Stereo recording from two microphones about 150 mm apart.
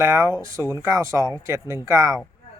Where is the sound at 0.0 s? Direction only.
20° right (ahead or behind).